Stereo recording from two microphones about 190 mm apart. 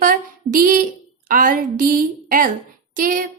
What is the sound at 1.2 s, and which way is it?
A woman's voice, 45° right (ahead or behind).